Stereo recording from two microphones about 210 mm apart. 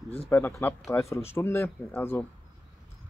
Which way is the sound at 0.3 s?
10° left (ahead or behind).